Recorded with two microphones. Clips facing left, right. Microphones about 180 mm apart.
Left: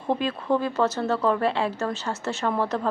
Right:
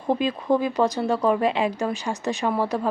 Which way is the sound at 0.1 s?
15° right (ahead or behind).